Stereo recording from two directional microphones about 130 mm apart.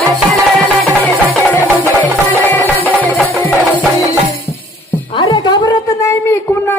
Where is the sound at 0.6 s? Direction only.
10° left (ahead or behind).